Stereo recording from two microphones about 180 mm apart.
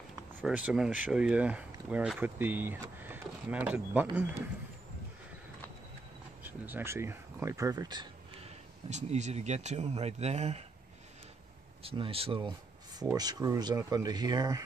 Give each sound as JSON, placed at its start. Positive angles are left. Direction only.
{"t": 0.4, "sound": "speech", "side_deg": -10}
{"t": 6.4, "sound": "speech", "side_deg": -10}
{"t": 8.9, "sound": "speech", "side_deg": -40}
{"t": 11.8, "sound": "speech", "side_deg": -30}